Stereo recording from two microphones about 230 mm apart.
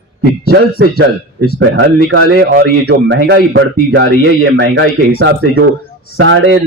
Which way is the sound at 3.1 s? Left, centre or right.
Right.